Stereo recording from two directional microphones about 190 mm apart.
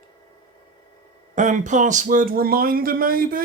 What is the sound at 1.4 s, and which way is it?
Speech, 40° right (ahead or behind).